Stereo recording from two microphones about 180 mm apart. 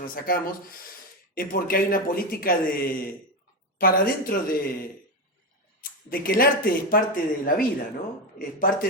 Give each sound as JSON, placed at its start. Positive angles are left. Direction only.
{"t": 0.0, "sound": "speech", "side_deg": 50}
{"t": 5.8, "sound": "speech", "side_deg": 55}